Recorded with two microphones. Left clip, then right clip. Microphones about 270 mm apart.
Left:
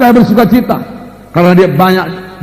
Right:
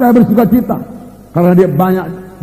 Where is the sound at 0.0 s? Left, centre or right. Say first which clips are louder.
Left 3 dB; left.